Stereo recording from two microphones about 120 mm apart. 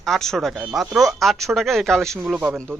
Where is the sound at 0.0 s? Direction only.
5° left (ahead or behind).